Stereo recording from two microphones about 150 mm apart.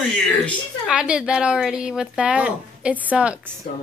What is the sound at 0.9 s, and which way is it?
Speech, 5° right (ahead or behind).